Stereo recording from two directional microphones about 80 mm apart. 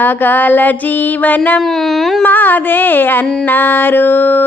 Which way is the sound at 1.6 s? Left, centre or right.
Centre.